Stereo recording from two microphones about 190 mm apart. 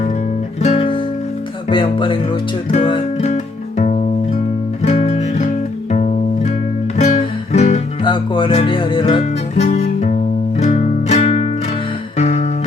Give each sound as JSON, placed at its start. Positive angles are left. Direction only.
{"t": 0.6, "sound": "music", "side_deg": 35}